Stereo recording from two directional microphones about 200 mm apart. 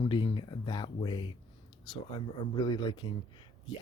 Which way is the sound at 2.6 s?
25° left (ahead or behind).